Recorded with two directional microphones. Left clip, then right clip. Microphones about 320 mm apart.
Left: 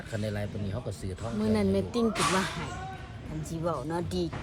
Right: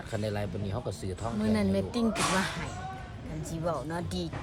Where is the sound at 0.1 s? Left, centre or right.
Centre.